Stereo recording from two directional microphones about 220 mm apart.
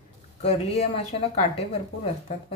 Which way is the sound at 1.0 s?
30° left (ahead or behind).